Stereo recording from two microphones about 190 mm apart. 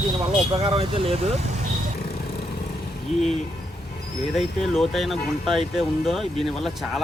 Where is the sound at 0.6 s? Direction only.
30° right (ahead or behind).